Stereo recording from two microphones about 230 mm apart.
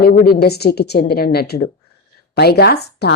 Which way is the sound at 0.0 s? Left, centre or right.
Left.